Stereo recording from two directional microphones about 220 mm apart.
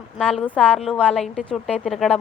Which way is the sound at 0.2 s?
Centre (ahead or behind).